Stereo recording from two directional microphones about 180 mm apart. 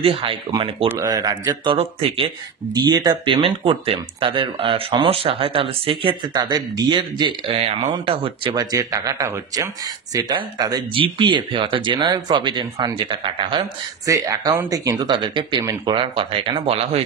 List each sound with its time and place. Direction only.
0.0 s speech: 30° right (ahead or behind)